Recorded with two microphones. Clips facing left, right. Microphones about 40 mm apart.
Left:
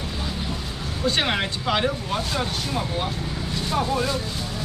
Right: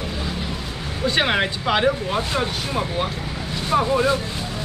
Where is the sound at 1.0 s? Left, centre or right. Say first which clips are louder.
Right 3 dB; centre.